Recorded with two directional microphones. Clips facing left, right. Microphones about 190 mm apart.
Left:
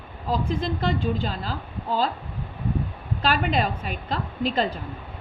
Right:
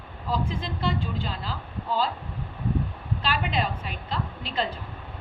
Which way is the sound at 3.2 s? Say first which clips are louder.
Left 5 dB; 45° left (ahead or behind).